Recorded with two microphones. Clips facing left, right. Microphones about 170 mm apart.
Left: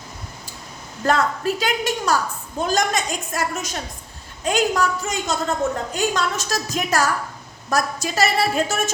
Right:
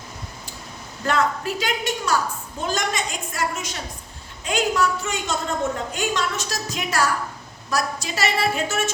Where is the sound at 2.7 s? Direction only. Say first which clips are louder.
Left 5 dB; 40° left (ahead or behind).